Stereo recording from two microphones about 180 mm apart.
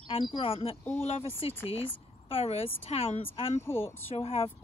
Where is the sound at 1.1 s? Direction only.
35° left (ahead or behind).